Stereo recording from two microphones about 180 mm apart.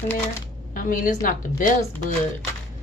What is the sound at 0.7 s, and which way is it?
Speech, 50° left (ahead or behind).